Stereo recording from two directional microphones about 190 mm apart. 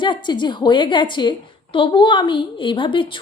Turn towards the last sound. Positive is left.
turn(degrees=25)  # may be behind; listen again after turning